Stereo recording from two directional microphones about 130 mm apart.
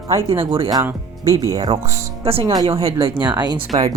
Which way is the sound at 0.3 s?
45° right (ahead or behind).